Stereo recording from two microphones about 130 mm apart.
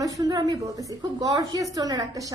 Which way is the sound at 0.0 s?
30° right (ahead or behind).